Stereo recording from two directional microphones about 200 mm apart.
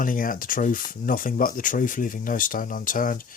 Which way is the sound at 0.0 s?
45° left (ahead or behind).